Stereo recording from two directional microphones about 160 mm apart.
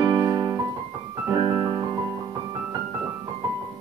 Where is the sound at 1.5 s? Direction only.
30° right (ahead or behind).